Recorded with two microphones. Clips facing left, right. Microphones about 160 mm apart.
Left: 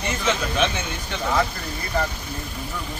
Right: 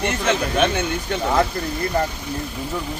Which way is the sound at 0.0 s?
55° right (ahead or behind).